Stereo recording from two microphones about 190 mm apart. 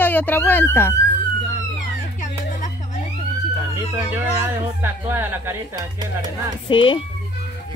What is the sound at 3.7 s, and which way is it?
Speech, 15° right (ahead or behind).